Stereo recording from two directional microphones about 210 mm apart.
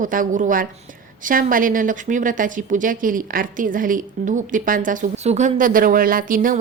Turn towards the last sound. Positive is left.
turn(degrees=-40)  # may be behind; listen again after turning